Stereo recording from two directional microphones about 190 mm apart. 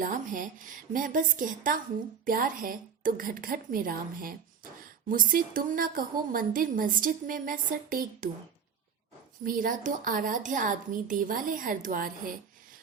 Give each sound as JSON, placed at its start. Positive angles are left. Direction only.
{"t": 0.0, "sound": "a woman's voice", "side_deg": -45}
{"t": 9.4, "sound": "a woman's voice", "side_deg": -45}